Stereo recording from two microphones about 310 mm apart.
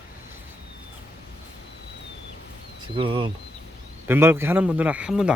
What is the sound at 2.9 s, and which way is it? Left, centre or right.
Speech, centre.